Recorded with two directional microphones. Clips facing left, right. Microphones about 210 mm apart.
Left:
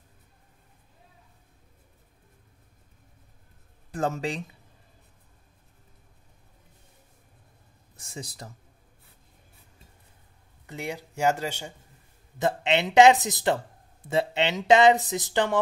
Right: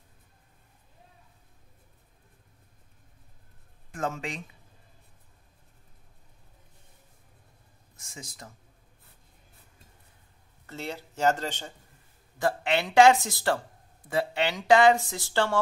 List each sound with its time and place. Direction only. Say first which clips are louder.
3.9 s speech: left 4 dB; 35° left (ahead or behind)
7.9 s a sound: left 6 dB; 35° left (ahead or behind)
10.7 s speech: left 2 dB; 15° left (ahead or behind)
12.4 s speech: left 2 dB; 20° left (ahead or behind)